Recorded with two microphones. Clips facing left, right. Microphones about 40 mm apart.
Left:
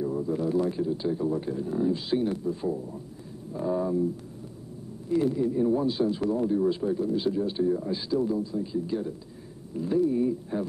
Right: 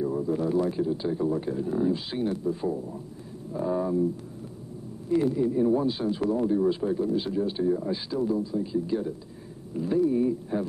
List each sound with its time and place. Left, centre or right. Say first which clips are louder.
0.0 s speech: right 1 dB; centre
5.3 s speech: right 1 dB; centre